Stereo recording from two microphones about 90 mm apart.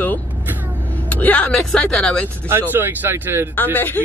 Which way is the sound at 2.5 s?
25° right (ahead or behind).